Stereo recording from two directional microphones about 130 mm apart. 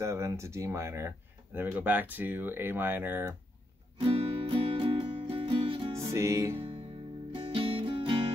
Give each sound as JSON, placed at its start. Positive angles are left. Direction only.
{"t": 0.0, "sound": "speech", "side_deg": -20}
{"t": 4.0, "sound": "music", "side_deg": -45}
{"t": 5.9, "sound": "music", "side_deg": -25}
{"t": 7.3, "sound": "music", "side_deg": -45}